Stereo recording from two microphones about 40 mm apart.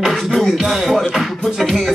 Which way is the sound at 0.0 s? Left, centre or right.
Centre.